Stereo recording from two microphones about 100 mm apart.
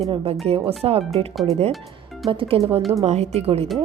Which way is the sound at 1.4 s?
90° right.